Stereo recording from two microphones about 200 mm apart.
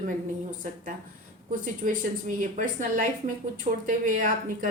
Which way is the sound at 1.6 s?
40° right (ahead or behind).